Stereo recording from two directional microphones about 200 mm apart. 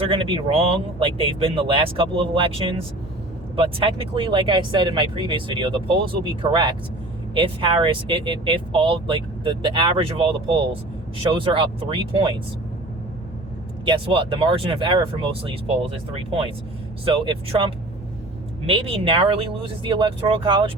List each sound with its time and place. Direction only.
0.1 s speech: 25° right (ahead or behind)
13.8 s speech: 25° right (ahead or behind)
17.1 s speech: 25° right (ahead or behind)